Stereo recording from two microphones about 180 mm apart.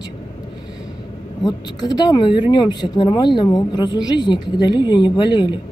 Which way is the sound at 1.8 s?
25° left (ahead or behind).